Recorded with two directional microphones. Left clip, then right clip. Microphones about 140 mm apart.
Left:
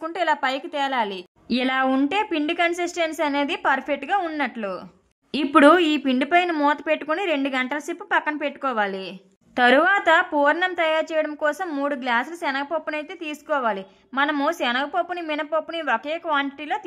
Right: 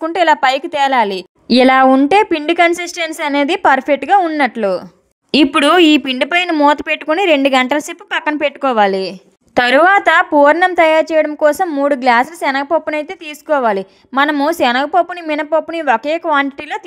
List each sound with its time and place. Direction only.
0.1 s a woman's voice: 45° right (ahead or behind)
11.6 s a woman's voice: 25° right (ahead or behind)
11.9 s a woman's voice: 40° right (ahead or behind)